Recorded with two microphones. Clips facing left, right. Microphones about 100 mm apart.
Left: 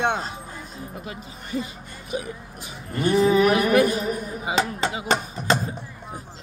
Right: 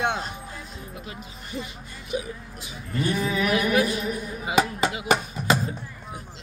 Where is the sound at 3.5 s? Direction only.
50° left (ahead or behind).